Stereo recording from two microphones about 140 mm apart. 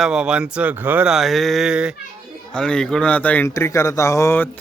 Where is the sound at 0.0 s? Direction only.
5° right (ahead or behind).